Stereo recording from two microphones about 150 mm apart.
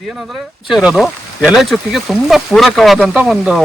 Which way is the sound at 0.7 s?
5° right (ahead or behind).